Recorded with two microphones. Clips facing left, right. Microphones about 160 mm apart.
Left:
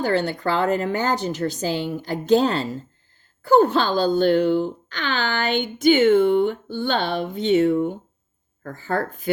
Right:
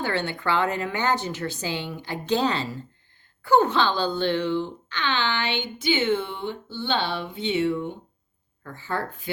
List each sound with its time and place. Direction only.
0.0 s a woman's voice: 35° left (ahead or behind)